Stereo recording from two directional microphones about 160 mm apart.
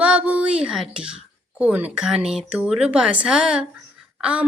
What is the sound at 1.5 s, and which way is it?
Speech, 10° right (ahead or behind).